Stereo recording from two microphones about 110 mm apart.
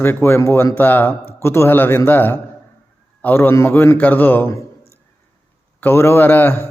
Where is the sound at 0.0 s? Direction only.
20° left (ahead or behind).